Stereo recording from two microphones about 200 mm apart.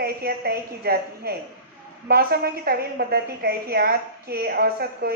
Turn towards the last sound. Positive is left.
turn(degrees=-50)  # may be behind; listen again after turning